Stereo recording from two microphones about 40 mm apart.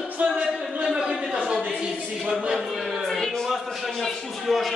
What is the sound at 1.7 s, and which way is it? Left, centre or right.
Speech, centre.